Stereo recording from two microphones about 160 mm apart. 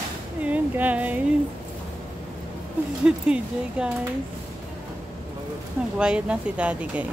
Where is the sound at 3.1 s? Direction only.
5° right (ahead or behind).